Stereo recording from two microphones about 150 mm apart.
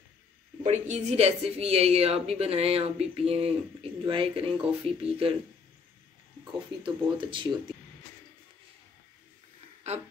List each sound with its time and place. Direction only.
0.7 s a woman's voice: 50° right (ahead or behind)
6.8 s speech: 35° right (ahead or behind)
9.9 s a sound: 45° right (ahead or behind)